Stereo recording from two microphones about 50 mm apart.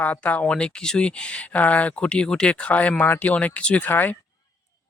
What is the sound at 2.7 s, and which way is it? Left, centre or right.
Speech, left.